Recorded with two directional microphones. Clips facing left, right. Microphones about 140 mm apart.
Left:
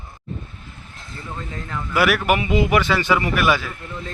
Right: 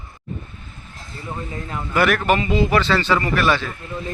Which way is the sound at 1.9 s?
5° left (ahead or behind).